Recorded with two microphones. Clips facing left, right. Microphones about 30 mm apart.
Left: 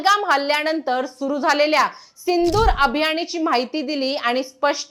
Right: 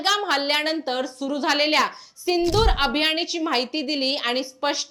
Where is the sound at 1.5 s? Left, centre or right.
Centre.